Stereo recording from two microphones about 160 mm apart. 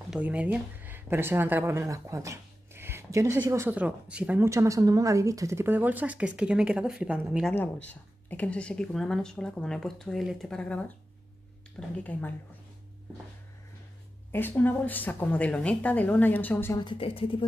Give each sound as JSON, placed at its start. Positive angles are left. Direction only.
{"t": 0.1, "sound": "speech", "side_deg": -10}
{"t": 7.9, "sound": "a woman's voice", "side_deg": 10}
{"t": 12.0, "sound": "a woman's voice", "side_deg": 10}
{"t": 14.3, "sound": "a woman's voice", "side_deg": 10}
{"t": 16.7, "sound": "a woman's voice", "side_deg": 30}